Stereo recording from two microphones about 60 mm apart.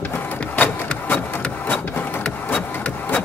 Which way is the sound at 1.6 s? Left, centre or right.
Left.